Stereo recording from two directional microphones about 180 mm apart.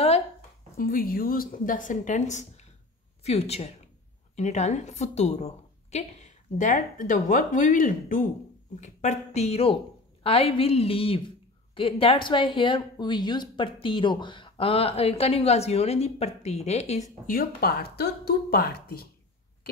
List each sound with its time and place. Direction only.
0.7 s a woman's voice: 55° left (ahead or behind); by 17.0 s 40° left (ahead or behind)
17.3 s a woman's voice: 55° left (ahead or behind)